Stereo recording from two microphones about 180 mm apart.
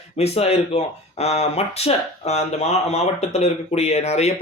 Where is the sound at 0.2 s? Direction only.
35° left (ahead or behind).